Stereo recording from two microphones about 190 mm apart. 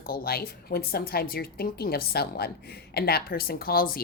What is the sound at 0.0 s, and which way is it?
A woman's voice, 50° left (ahead or behind).